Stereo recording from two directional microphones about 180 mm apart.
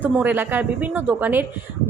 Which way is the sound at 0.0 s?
10° right (ahead or behind).